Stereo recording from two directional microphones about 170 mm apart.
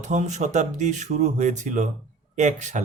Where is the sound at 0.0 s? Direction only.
45° right (ahead or behind).